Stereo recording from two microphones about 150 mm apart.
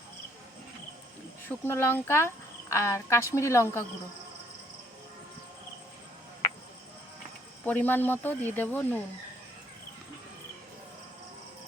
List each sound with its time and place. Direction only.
1.5 s speech: 15° left (ahead or behind)
7.6 s speech: 10° left (ahead or behind)